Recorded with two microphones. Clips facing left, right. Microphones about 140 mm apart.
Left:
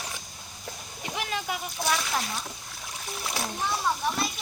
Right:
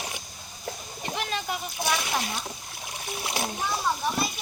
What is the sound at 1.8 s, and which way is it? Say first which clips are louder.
Speech: even; 20° right (ahead or behind).